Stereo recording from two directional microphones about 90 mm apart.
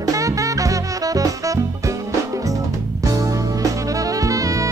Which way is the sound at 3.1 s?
40° right (ahead or behind).